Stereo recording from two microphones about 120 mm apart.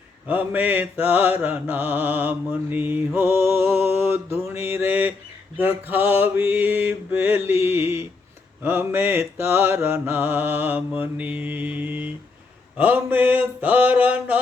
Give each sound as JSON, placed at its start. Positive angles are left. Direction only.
{"t": 0.3, "sound": "mantra", "side_deg": -15}
{"t": 7.6, "sound": "speech", "side_deg": -20}
{"t": 8.6, "sound": "mantra", "side_deg": -20}